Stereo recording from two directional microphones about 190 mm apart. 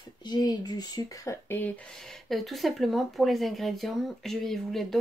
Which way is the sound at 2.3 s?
Centre (ahead or behind).